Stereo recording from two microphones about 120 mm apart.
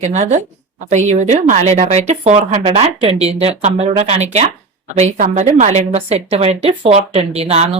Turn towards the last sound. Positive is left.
turn(degrees=-55)  # may be behind; listen again after turning